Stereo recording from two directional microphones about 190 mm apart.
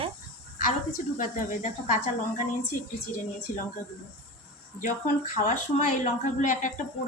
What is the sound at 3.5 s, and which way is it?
Speech, 45° left (ahead or behind).